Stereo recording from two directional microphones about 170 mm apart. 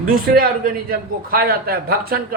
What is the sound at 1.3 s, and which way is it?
A man's voice, 65° right (ahead or behind).